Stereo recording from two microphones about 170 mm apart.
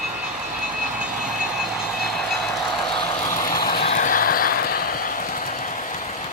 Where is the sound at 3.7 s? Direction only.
40° left (ahead or behind); by 4.9 s 60° left (ahead or behind).